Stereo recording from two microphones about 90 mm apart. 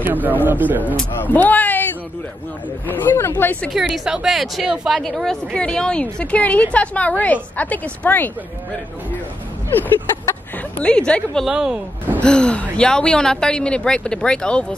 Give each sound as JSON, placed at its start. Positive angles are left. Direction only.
{"t": 0.0, "sound": "speech", "side_deg": -20}
{"t": 1.2, "sound": "speech", "side_deg": 20}
{"t": 2.9, "sound": "speech", "side_deg": 25}
{"t": 3.7, "sound": "a woman's voice", "side_deg": -5}
{"t": 9.7, "sound": "a sound", "side_deg": 20}
{"t": 10.8, "sound": "a woman's voice", "side_deg": 10}
{"t": 11.4, "sound": "speech", "side_deg": -5}
{"t": 12.2, "sound": "a woman's voice", "side_deg": 10}